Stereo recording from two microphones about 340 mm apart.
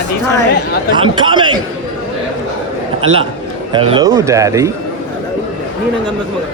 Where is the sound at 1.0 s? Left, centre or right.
Centre.